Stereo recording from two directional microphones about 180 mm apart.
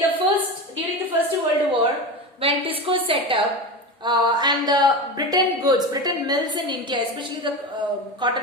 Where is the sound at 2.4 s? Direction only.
30° right (ahead or behind).